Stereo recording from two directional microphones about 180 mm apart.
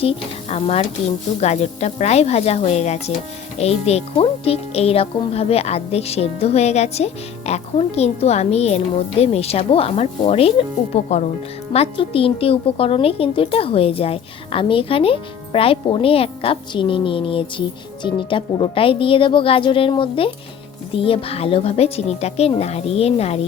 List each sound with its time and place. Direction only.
0.0 s speech: 35° left (ahead or behind)